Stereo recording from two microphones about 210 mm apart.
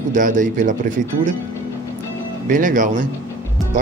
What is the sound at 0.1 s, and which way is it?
Speech, 40° right (ahead or behind).